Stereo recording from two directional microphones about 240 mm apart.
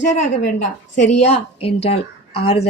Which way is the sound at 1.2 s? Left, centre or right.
Left.